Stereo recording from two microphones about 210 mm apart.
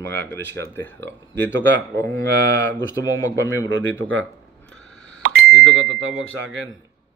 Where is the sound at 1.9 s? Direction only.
60° right (ahead or behind).